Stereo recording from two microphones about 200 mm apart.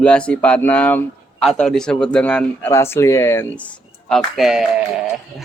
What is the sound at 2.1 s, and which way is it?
Speech, 5° left (ahead or behind).